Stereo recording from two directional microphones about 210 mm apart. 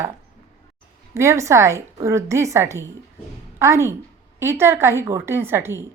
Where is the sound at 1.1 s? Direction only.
15° right (ahead or behind).